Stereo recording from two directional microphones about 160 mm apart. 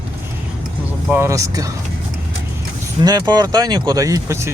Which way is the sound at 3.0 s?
25° right (ahead or behind).